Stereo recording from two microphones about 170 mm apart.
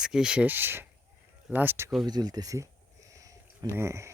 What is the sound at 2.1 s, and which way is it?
Speech, 25° right (ahead or behind).